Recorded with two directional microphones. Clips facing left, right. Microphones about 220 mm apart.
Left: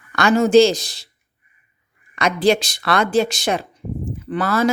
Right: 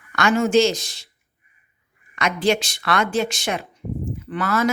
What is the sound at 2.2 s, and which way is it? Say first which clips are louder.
Speech: left 4 dB; 35° left (ahead or behind).